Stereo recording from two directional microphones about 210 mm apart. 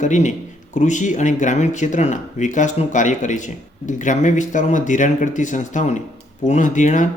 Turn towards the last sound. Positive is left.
turn(degrees=35)  # may be behind; listen again after turning